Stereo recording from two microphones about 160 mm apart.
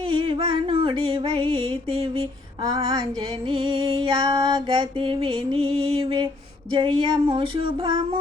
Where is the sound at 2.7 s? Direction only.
25° right (ahead or behind).